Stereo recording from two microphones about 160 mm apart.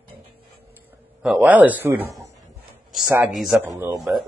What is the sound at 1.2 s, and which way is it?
Speech, 10° right (ahead or behind).